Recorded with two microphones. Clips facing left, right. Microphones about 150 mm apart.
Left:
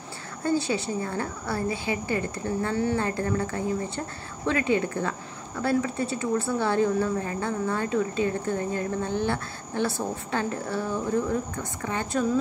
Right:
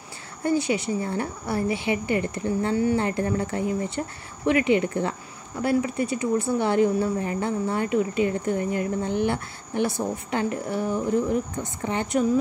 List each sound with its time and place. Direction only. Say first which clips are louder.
0.4 s a woman's voice: right 2 dB; 15° right (ahead or behind)